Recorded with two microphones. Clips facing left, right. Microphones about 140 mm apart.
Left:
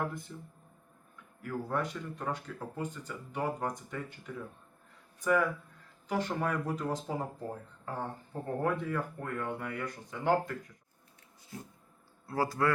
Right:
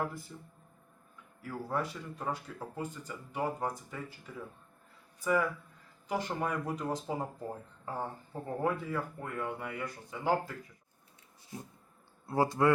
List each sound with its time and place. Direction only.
0.0 s speech: 5° right (ahead or behind)
1.4 s speech: 5° right (ahead or behind)
12.2 s speech: 25° right (ahead or behind)